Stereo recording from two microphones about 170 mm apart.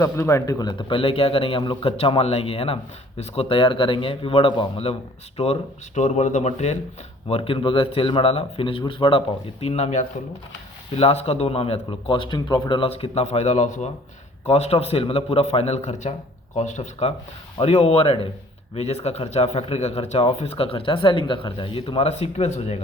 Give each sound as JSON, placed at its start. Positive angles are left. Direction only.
{"t": 0.0, "sound": "speech", "side_deg": 15}